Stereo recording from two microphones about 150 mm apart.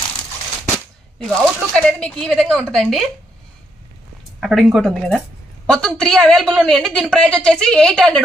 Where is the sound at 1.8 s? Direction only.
5° left (ahead or behind).